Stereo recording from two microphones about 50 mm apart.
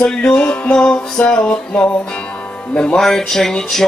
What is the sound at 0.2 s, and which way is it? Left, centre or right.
Music, left.